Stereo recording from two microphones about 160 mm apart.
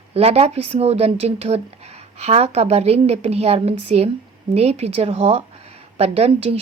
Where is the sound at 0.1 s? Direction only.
40° right (ahead or behind).